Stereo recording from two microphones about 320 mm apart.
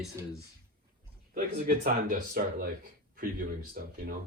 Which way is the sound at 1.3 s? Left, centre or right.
Right.